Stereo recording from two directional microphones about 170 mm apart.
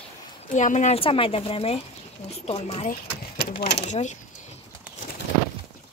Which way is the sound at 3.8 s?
45° left (ahead or behind).